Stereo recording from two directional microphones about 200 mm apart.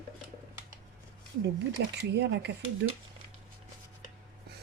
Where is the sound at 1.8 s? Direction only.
55° right (ahead or behind).